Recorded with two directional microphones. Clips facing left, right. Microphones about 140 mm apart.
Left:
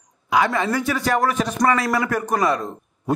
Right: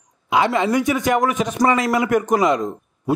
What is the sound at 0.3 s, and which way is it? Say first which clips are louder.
A man's voice: right 2 dB; 20° right (ahead or behind).